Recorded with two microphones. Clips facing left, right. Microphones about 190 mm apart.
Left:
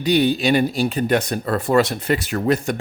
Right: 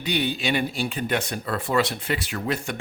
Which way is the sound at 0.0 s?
40° left (ahead or behind).